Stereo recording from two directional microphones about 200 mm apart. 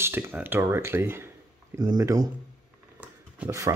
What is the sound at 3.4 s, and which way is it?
Speech, 15° right (ahead or behind).